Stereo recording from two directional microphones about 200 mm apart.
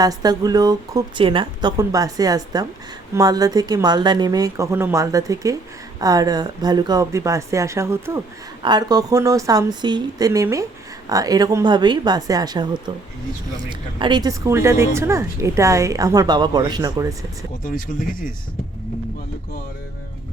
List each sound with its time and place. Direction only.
0.0 s speech: 20° right (ahead or behind)